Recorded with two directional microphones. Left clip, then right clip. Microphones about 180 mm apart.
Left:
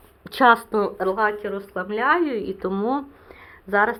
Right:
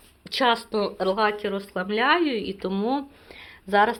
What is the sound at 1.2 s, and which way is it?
Speech, 35° right (ahead or behind).